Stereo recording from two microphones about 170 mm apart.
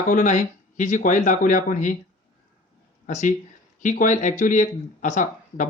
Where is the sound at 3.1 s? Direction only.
45° left (ahead or behind).